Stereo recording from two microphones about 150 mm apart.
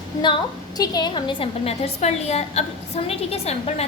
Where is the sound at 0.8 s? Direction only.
25° left (ahead or behind); by 3.8 s 45° left (ahead or behind).